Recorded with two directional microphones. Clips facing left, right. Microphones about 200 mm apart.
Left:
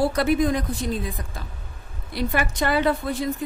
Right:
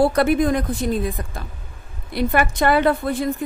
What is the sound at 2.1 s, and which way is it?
A woman's voice, 55° right (ahead or behind).